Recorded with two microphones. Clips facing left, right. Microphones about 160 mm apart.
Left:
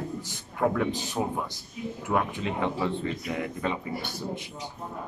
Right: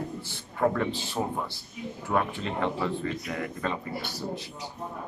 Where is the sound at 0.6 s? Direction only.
Centre (ahead or behind).